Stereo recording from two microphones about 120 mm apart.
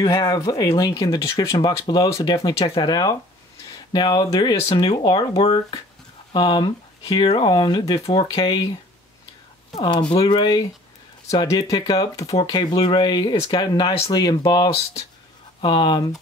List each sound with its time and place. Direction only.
0.0 s speech: 35° left (ahead or behind)
9.8 s speech: 40° left (ahead or behind)